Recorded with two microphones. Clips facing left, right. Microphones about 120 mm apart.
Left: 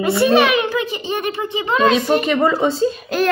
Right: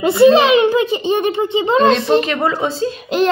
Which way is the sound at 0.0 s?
25° right (ahead or behind).